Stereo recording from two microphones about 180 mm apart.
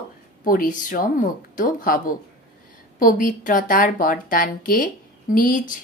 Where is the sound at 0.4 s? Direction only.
50° left (ahead or behind).